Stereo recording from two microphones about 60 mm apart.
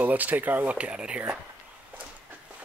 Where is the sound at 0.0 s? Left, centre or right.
Right.